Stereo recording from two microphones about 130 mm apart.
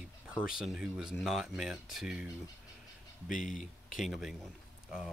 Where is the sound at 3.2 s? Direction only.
85° left.